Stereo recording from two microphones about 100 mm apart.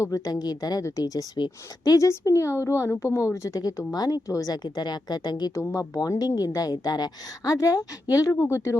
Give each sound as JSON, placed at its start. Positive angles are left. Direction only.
{"t": 0.0, "sound": "speech", "side_deg": 35}